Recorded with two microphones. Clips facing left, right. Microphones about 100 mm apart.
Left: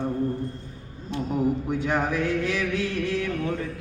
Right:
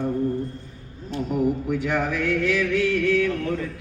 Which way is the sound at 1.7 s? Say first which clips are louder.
Right 1 dB; 35° left (ahead or behind).